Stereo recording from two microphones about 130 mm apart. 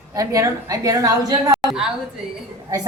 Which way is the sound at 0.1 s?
25° right (ahead or behind).